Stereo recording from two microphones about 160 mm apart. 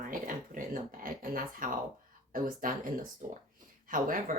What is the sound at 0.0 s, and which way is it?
Speech, 60° right (ahead or behind).